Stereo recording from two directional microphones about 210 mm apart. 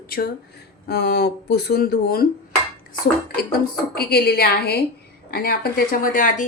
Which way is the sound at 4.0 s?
50° left (ahead or behind).